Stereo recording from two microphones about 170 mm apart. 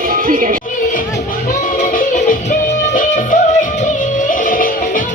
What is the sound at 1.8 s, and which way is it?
Music, 45° left (ahead or behind).